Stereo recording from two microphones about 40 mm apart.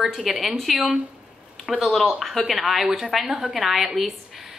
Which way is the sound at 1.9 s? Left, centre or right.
Centre.